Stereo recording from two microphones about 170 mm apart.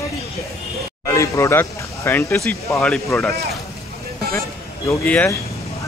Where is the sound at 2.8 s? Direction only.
Centre (ahead or behind).